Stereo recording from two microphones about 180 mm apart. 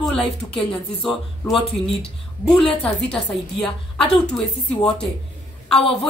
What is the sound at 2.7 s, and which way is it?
Speech, 30° left (ahead or behind).